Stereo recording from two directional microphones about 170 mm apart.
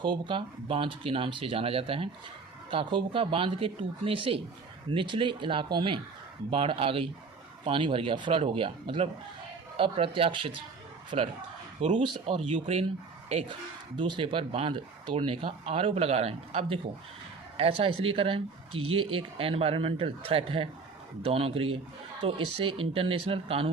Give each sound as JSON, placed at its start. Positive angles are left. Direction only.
{"t": 0.0, "sound": "speech", "side_deg": -30}
{"t": 12.0, "sound": "speech", "side_deg": -30}